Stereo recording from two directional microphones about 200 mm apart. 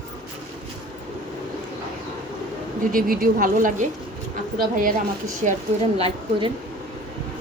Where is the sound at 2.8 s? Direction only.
45° right (ahead or behind).